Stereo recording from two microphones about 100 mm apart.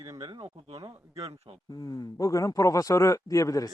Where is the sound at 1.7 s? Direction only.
40° left (ahead or behind).